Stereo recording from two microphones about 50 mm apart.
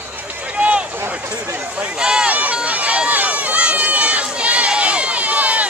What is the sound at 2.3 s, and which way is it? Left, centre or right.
Run, right.